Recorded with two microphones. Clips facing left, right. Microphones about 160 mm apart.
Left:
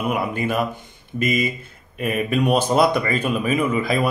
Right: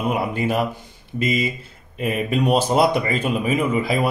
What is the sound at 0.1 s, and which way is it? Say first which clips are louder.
Speech: right 1 dB; 25° right (ahead or behind).